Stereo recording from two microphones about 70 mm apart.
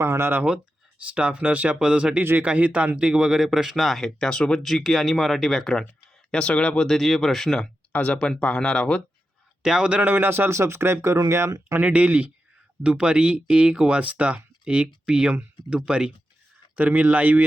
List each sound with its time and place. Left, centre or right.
0.0 s speech: right
1.1 s speech: centre
7.6 s speech: left
9.6 s speech: centre; by 11.8 s right
11.8 s speech: centre
16.7 s speech: right